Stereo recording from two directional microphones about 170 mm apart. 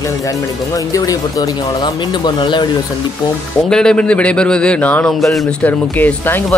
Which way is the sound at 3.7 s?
5° left (ahead or behind).